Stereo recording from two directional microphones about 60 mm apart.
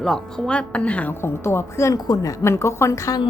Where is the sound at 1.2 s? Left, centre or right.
Left.